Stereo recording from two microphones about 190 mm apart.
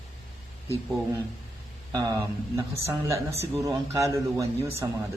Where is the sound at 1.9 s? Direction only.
20° right (ahead or behind).